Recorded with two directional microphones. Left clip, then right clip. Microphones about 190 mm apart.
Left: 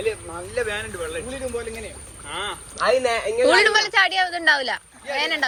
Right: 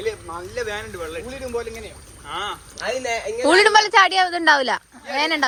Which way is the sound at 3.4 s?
30° right (ahead or behind).